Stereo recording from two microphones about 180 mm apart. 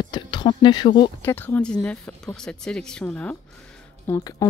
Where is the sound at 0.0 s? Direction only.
25° left (ahead or behind).